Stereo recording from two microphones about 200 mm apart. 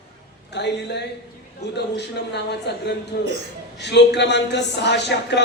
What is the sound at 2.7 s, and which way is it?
A man's voice, 60° left (ahead or behind).